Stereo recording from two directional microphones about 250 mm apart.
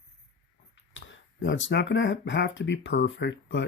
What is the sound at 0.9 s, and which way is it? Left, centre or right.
Speech, left.